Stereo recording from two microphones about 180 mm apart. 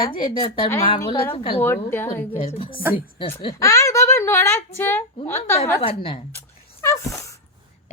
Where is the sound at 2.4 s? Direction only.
30° left (ahead or behind).